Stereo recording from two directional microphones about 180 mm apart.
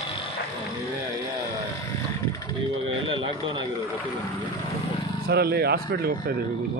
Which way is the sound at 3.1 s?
25° right (ahead or behind).